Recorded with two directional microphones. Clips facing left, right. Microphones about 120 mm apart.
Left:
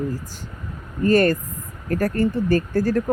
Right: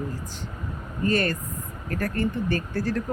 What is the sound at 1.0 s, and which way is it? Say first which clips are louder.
Speech: left 7 dB; 45° left (ahead or behind).